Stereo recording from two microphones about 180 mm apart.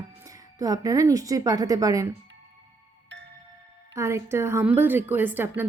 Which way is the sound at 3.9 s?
15° right (ahead or behind).